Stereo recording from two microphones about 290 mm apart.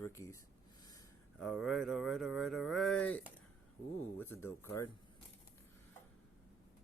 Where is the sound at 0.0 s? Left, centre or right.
Centre.